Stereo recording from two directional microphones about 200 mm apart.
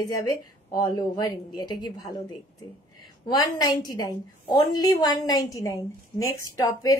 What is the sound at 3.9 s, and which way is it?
A woman's voice, 20° left (ahead or behind).